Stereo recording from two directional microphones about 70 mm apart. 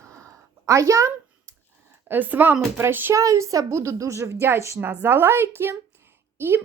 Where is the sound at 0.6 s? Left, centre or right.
Right.